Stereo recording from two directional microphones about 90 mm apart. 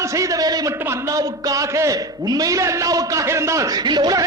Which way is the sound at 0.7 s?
30° right (ahead or behind).